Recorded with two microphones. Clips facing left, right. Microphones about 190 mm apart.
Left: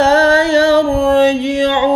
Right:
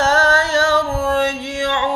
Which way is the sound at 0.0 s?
20° left (ahead or behind).